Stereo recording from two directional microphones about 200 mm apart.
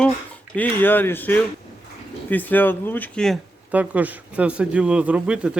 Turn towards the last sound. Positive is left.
turn(degrees=-5)  # may be behind; listen again after turning